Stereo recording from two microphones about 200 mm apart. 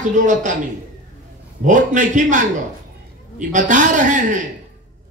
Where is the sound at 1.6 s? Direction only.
40° right (ahead or behind).